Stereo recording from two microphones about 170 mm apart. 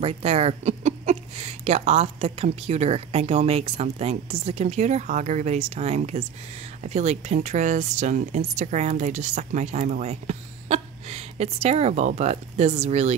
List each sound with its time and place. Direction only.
0.0 s speech: 35° right (ahead or behind)